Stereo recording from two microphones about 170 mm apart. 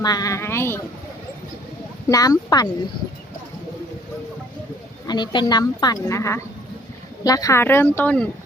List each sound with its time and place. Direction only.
0.0 s speech: 20° left (ahead or behind)
2.0 s a woman's voice: 20° left (ahead or behind)
5.0 s a woman's voice: 25° left (ahead or behind); by 8.3 s 10° left (ahead or behind)